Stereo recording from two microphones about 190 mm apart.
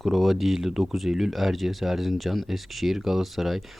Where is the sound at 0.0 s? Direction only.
Centre (ahead or behind).